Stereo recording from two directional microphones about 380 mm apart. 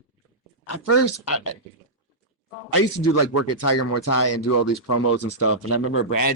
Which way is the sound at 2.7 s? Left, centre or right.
Left.